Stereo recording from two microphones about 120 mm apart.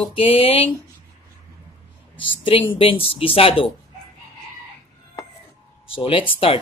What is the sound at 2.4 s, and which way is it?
Speech, 45° left (ahead or behind).